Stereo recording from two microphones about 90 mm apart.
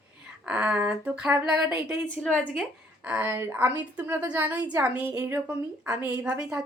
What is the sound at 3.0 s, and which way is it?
A woman's voice, 20° right (ahead or behind).